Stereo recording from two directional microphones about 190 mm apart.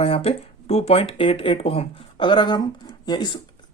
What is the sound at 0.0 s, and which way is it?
Speech, 30° left (ahead or behind).